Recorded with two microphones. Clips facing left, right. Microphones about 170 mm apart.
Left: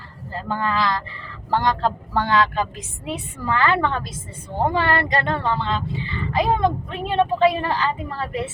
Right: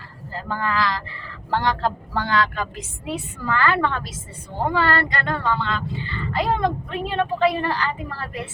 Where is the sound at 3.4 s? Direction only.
25° left (ahead or behind).